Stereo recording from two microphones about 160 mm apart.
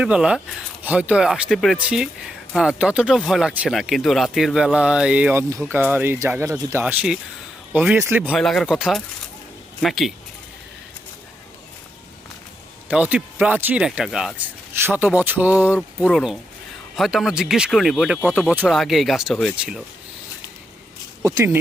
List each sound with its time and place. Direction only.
0.0 s speech: 5° right (ahead or behind)
6.8 s speech: 5° right (ahead or behind)
8.4 s speech: centre (ahead or behind)
12.9 s speech: 10° right (ahead or behind)
21.2 s speech: 20° right (ahead or behind)